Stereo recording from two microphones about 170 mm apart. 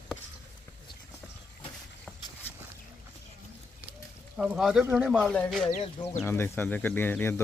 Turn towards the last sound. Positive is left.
turn(degrees=10)  # may be behind; listen again after turning